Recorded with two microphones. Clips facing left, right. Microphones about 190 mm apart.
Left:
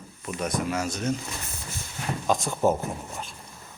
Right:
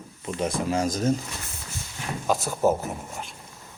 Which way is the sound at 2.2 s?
5° right (ahead or behind).